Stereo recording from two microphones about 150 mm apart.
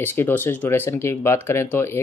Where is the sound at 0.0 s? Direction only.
15° left (ahead or behind).